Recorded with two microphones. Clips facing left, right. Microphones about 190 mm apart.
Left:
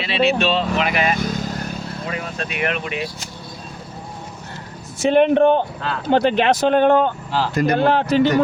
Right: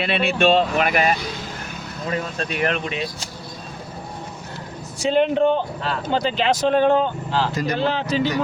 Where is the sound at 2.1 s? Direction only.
35° right (ahead or behind).